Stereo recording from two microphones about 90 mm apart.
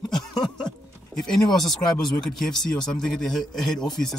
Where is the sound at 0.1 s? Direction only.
5° left (ahead or behind).